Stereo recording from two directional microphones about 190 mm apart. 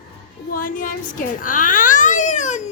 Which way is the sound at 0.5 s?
45° left (ahead or behind).